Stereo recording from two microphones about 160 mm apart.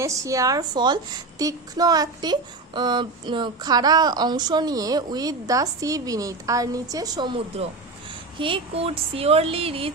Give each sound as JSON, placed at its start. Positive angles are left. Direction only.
{"t": 0.0, "sound": "a woman's voice", "side_deg": -20}